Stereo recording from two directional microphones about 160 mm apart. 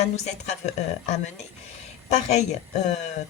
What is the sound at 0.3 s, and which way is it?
A woman's voice, 45° left (ahead or behind).